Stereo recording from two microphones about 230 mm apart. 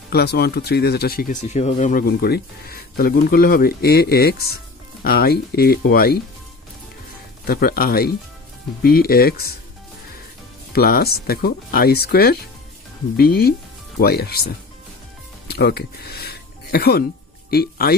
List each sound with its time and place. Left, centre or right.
0.1 s speech: left
7.4 s speech: left
10.7 s speech: left
15.4 s music: left
17.5 s speech: left